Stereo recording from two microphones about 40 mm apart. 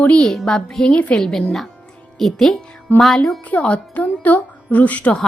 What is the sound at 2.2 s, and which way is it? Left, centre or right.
Speech, centre.